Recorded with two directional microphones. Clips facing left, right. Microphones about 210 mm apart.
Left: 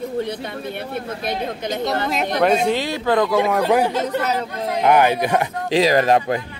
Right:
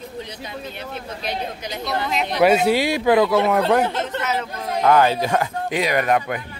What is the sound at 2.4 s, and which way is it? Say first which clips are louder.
Speech: right 3 dB; 5° right (ahead or behind).